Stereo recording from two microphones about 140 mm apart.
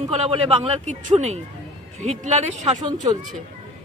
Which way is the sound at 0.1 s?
45° right (ahead or behind).